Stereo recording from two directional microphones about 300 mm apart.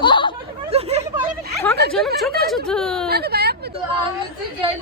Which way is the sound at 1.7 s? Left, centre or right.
Centre.